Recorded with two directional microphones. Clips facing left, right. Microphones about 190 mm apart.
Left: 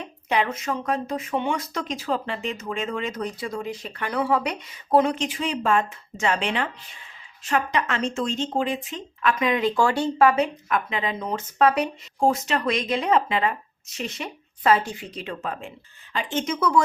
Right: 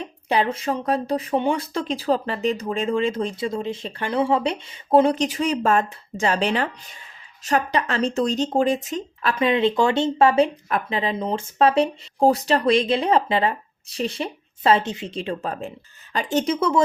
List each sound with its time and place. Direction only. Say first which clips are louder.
0.0 s speech: right 3 dB; 30° right (ahead or behind)